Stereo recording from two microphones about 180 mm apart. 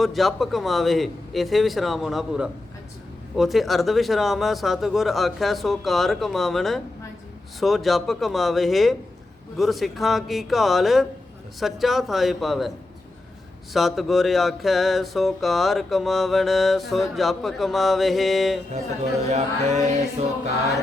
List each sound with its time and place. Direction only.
0.0 s mantra: centre (ahead or behind)
13.7 s mantra: centre (ahead or behind)
19.2 s music: 40° right (ahead or behind)